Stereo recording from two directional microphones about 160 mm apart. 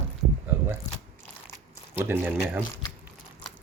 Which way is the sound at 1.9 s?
15° right (ahead or behind).